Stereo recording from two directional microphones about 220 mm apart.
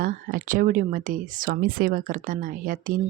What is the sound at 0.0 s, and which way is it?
Speech, 40° right (ahead or behind).